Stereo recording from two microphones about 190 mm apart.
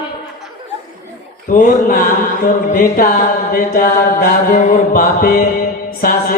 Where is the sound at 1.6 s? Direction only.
45° left (ahead or behind).